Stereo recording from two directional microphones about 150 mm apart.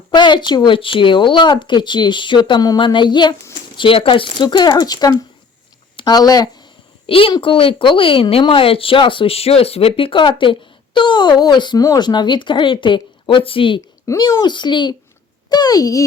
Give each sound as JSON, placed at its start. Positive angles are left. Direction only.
{"t": 0.1, "sound": "a woman's voice", "side_deg": 30}
{"t": 7.1, "sound": "a woman's voice", "side_deg": 35}